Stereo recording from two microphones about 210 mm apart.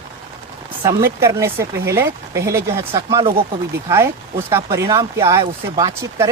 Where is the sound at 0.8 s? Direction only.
15° right (ahead or behind).